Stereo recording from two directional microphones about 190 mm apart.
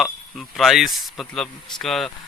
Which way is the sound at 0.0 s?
Centre (ahead or behind).